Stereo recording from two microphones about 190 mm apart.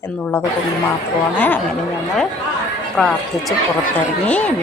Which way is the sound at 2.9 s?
Centre (ahead or behind).